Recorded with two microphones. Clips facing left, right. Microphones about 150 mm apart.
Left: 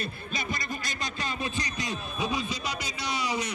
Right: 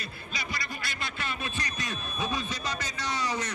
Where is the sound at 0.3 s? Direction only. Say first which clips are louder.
Left 3 dB; 45° left (ahead or behind).